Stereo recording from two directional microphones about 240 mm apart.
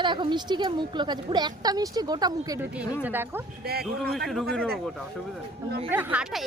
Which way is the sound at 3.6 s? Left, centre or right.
Right.